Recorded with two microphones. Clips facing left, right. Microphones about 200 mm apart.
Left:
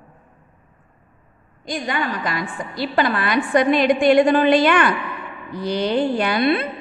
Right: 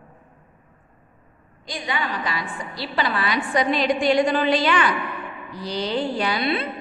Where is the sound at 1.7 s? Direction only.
50° left (ahead or behind).